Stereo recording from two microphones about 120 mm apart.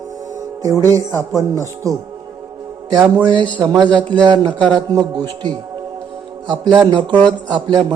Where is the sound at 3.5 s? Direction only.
40° right (ahead or behind).